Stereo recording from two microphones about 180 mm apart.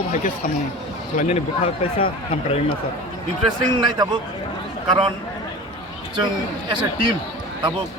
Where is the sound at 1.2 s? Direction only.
40° left (ahead or behind).